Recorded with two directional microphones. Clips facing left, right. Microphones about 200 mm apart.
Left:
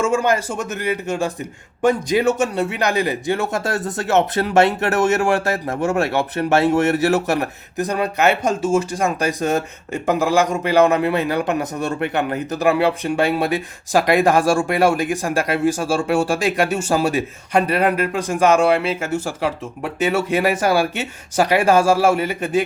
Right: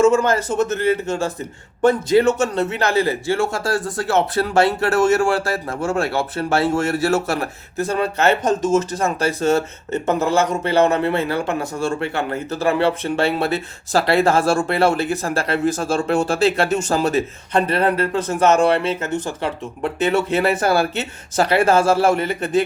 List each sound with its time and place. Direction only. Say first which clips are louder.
0.0 s a man's voice: right 3 dB; 15° left (ahead or behind)